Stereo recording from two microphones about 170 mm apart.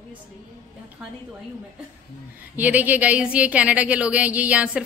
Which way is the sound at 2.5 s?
10° right (ahead or behind).